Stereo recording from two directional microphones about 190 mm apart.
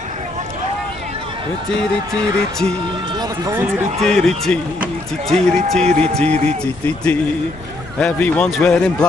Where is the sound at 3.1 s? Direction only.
20° right (ahead or behind).